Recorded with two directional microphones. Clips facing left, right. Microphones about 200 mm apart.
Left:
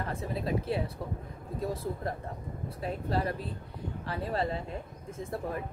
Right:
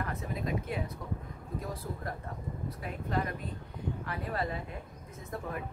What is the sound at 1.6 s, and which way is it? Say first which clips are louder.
Speech: left 8 dB; 25° left (ahead or behind).